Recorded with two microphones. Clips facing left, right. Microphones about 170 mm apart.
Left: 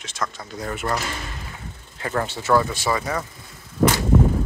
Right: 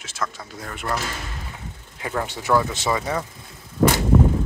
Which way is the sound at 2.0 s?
10° right (ahead or behind).